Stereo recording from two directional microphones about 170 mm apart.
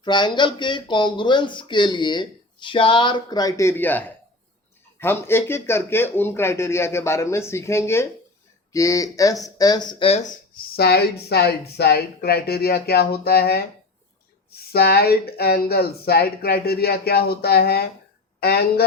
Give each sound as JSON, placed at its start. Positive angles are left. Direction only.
{"t": 0.0, "sound": "speech", "side_deg": 25}
{"t": 10.1, "sound": "speech", "side_deg": 40}
{"t": 10.5, "sound": "speech", "side_deg": 70}
{"t": 14.7, "sound": "speech", "side_deg": 65}